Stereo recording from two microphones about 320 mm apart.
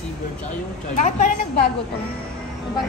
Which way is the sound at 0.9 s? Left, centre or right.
Left.